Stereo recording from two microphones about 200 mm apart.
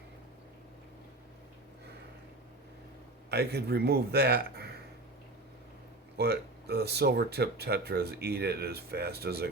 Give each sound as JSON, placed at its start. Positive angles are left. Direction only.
{"t": 3.2, "sound": "speech", "side_deg": -55}
{"t": 6.1, "sound": "speech", "side_deg": -55}